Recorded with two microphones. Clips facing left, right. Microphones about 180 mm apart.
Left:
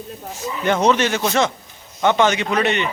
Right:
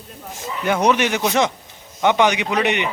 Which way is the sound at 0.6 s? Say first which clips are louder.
Left 1 dB; 10° right (ahead or behind).